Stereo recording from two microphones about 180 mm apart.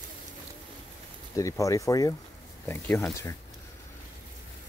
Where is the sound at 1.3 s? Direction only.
20° left (ahead or behind).